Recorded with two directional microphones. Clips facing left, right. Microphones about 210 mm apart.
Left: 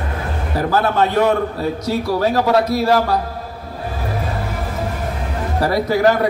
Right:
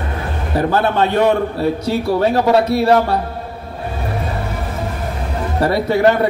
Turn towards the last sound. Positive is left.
turn(degrees=-25)  # may be behind; listen again after turning